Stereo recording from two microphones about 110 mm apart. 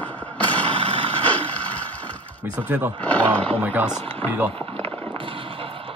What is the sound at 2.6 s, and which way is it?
Speech, 15° right (ahead or behind).